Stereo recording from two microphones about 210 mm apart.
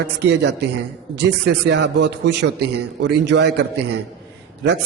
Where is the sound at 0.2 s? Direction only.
55° right (ahead or behind).